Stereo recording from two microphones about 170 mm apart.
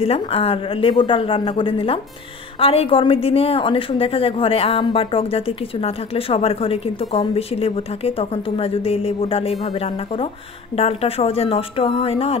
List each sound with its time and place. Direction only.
0.0 s a woman's voice: 35° left (ahead or behind)